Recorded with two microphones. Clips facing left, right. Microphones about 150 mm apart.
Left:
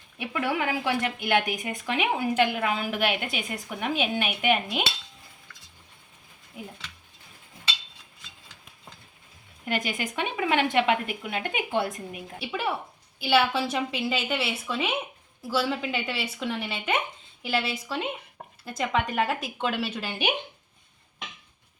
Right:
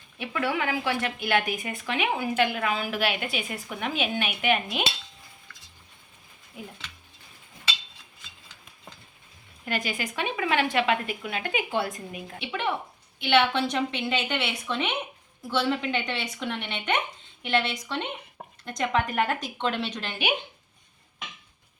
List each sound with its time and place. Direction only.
0.2 s speech: 15° left (ahead or behind)
9.6 s speech: 20° left (ahead or behind)
12.4 s a woman's voice: 5° left (ahead or behind)